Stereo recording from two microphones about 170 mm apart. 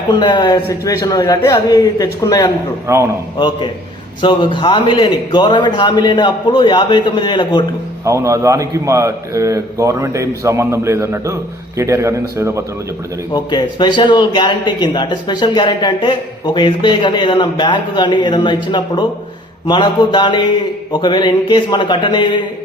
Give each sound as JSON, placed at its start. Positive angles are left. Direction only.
{"t": 0.1, "sound": "speech", "side_deg": 25}
{"t": 2.8, "sound": "a man's voice", "side_deg": -15}
{"t": 3.3, "sound": "speech", "side_deg": 25}
{"t": 8.0, "sound": "a man's voice", "side_deg": -20}
{"t": 13.3, "sound": "speech", "side_deg": 25}